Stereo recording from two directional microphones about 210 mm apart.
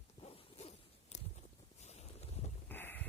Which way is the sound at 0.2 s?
30° left (ahead or behind).